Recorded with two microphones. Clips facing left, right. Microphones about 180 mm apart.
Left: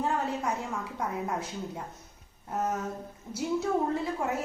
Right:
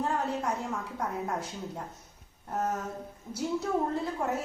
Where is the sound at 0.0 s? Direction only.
Centre (ahead or behind).